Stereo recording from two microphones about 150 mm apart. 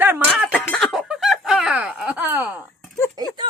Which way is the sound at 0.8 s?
5° right (ahead or behind).